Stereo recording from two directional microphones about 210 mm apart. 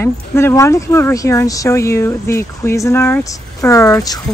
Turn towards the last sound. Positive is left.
turn(degrees=15)  # may be behind; listen again after turning